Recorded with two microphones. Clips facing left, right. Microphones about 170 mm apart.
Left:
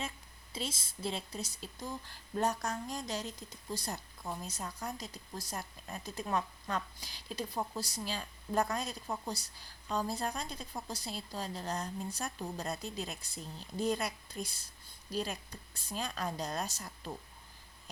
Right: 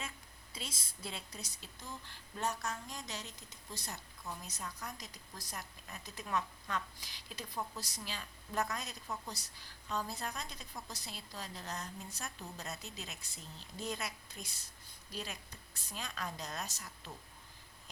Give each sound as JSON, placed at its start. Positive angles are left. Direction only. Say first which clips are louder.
{"t": 0.5, "sound": "speech", "louder": "left 8 dB", "side_deg": 25}